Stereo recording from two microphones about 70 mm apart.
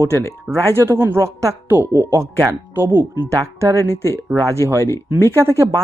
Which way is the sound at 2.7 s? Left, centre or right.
Right.